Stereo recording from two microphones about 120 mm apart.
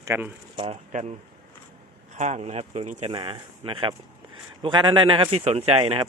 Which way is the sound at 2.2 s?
75° right (ahead or behind).